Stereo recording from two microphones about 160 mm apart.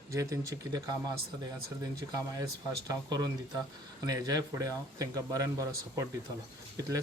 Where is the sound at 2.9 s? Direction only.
25° right (ahead or behind).